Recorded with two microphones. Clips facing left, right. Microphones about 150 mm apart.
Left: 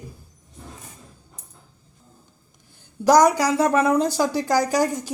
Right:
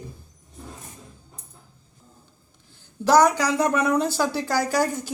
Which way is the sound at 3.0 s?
10° left (ahead or behind).